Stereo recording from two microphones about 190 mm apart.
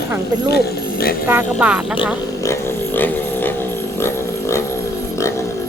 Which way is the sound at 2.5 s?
10° left (ahead or behind).